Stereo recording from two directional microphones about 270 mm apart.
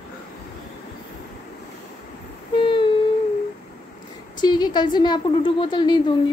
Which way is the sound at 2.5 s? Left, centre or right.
Centre.